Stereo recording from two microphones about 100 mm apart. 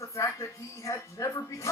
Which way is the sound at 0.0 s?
30° left (ahead or behind).